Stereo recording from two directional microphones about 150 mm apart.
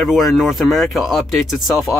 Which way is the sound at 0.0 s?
Centre (ahead or behind).